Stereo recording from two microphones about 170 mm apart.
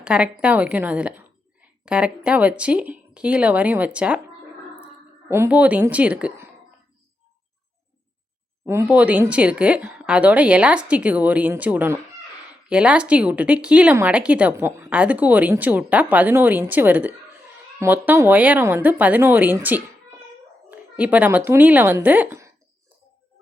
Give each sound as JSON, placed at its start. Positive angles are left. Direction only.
{"t": 0.0, "sound": "a woman's voice", "side_deg": -5}
{"t": 5.3, "sound": "a woman's voice", "side_deg": -10}
{"t": 8.6, "sound": "a woman's voice", "side_deg": -15}